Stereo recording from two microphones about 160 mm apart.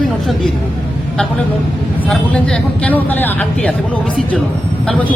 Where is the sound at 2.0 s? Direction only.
5° left (ahead or behind).